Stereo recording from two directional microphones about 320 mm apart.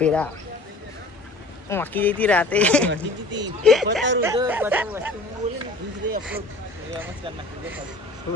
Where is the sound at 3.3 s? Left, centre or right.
Right.